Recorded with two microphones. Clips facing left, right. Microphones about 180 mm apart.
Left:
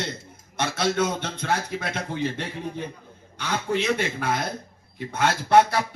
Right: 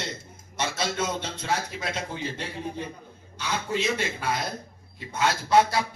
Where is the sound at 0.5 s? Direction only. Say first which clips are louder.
Left 5 dB; 60° left (ahead or behind).